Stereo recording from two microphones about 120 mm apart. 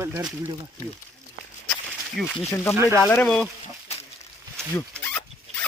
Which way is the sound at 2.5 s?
20° left (ahead or behind).